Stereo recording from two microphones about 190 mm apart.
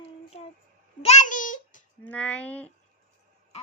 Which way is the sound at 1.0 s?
35° left (ahead or behind).